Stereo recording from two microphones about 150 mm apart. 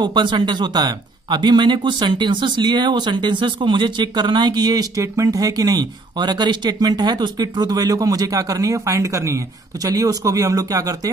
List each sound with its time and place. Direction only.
0.0 s speech: 30° right (ahead or behind)